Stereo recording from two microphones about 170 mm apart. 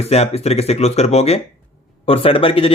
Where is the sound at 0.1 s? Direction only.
40° left (ahead or behind).